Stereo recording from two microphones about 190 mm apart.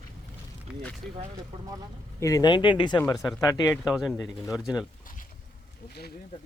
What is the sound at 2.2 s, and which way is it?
Speech, 20° left (ahead or behind).